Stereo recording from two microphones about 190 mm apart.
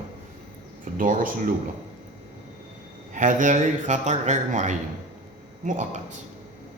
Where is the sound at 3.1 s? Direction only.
40° right (ahead or behind).